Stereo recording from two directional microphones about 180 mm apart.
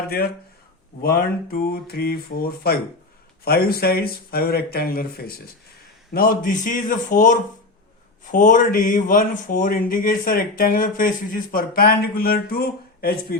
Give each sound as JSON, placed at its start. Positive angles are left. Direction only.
{"t": 1.0, "sound": "speech", "side_deg": 55}